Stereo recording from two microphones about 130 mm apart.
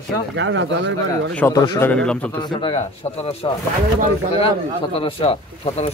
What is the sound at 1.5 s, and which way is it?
Speech, 30° left (ahead or behind).